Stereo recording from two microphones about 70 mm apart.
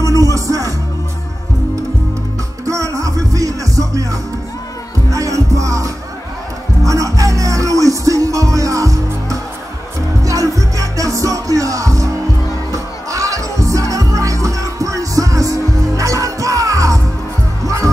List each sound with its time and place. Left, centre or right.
0.0 s music: right
2.6 s music: right